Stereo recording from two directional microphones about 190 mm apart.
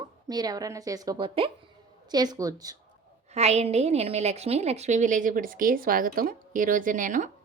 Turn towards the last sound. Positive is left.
turn(degrees=-40)  # may be behind; listen again after turning